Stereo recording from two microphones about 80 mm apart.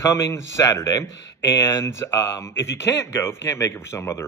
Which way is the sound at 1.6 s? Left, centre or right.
Left.